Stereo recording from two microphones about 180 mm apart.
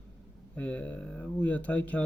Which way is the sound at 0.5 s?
10° left (ahead or behind).